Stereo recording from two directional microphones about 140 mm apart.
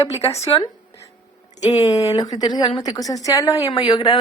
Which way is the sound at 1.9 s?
25° left (ahead or behind).